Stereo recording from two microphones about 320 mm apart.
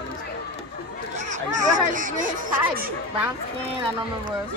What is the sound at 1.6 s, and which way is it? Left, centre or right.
Speech, right.